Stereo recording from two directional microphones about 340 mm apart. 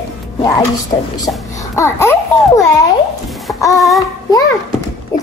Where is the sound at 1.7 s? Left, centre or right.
Centre.